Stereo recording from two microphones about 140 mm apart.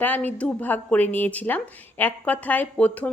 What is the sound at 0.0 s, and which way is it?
A woman's voice, 10° left (ahead or behind).